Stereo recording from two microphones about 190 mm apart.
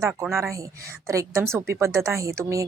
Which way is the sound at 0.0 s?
10° right (ahead or behind).